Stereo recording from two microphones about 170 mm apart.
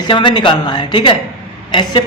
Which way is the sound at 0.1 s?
30° left (ahead or behind).